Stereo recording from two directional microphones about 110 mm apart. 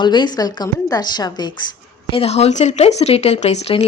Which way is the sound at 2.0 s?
65° left (ahead or behind).